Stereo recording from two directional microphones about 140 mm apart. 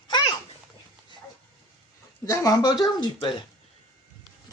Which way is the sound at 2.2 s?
25° left (ahead or behind).